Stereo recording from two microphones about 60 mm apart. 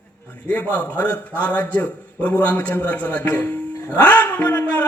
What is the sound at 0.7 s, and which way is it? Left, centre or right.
A man's voice, left.